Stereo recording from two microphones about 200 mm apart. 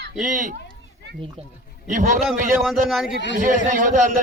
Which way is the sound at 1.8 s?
40° right (ahead or behind).